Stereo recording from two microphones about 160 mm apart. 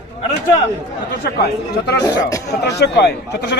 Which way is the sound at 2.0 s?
20° left (ahead or behind).